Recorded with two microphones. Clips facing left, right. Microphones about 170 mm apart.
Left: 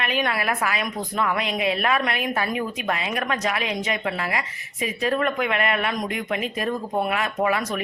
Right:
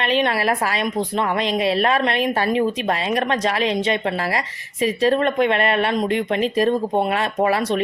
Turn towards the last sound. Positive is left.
turn(degrees=-30)  # may be behind; listen again after turning